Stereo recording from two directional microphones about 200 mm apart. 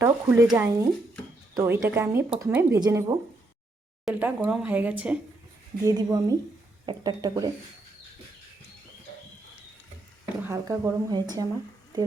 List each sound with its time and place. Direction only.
0.0 s a sound: 15° right (ahead or behind)
0.5 s speech: 15° right (ahead or behind)
4.0 s speech: 10° right (ahead or behind)
5.8 s speech: 20° right (ahead or behind)
10.4 s speech: 15° right (ahead or behind)